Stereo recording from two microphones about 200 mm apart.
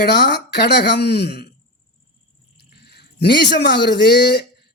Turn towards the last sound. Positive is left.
turn(degrees=55)  # may be behind; listen again after turning